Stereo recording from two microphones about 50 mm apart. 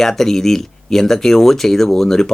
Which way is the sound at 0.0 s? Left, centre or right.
Centre.